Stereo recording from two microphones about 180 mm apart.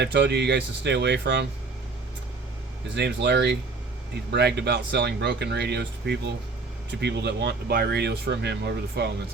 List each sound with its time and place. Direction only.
0.0 s speech: 70° right (ahead or behind)
2.9 s speech: 70° right (ahead or behind)